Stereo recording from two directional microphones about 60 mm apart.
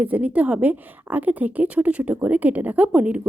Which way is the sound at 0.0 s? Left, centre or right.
Right.